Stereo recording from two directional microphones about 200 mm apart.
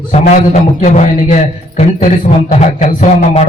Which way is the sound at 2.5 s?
40° left (ahead or behind).